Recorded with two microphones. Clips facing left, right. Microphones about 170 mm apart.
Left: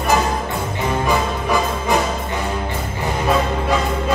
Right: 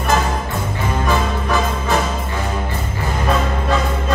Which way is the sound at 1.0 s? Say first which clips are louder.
Right 2 dB; 15° left (ahead or behind).